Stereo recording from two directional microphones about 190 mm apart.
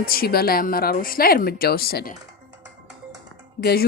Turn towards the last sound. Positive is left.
turn(degrees=55)  # may be behind; listen again after turning